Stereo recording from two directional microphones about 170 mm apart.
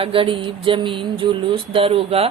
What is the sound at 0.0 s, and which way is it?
A woman's voice, 30° right (ahead or behind).